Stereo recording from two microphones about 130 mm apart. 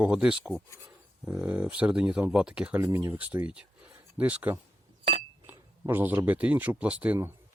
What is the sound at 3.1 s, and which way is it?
Speech, 10° right (ahead or behind).